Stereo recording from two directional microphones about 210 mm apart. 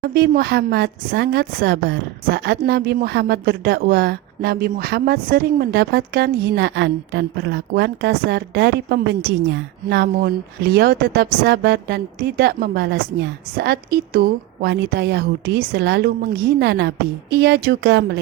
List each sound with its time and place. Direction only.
0.0 s a woman's voice: 50° right (ahead or behind)